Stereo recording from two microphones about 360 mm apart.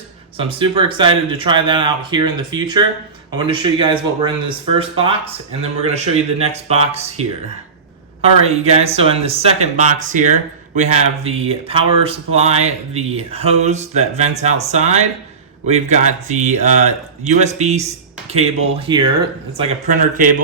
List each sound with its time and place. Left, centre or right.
0.3 s speech: centre